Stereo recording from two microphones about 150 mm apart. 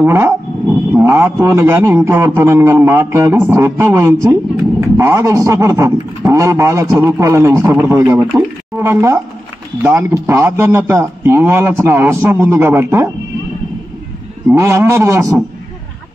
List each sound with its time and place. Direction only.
0.0 s speech: 15° right (ahead or behind)
14.5 s a man's voice: 20° right (ahead or behind)